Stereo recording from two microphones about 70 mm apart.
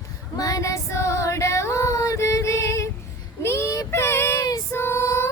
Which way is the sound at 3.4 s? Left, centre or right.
Left.